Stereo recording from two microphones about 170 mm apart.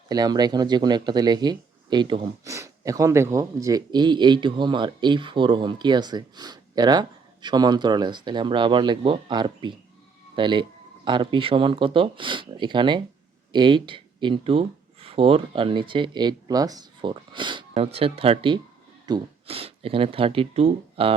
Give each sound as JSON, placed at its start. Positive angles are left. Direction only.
{"t": 0.1, "sound": "speech", "side_deg": -25}